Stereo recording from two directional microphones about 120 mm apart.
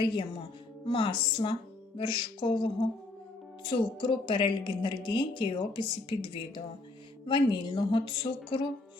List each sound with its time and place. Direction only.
0.0 s a woman's voice: 45° left (ahead or behind)
2.0 s music: 40° left (ahead or behind)
3.7 s a woman's voice: 40° left (ahead or behind)